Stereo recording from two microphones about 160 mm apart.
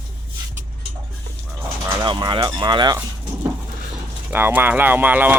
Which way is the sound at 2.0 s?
30° right (ahead or behind).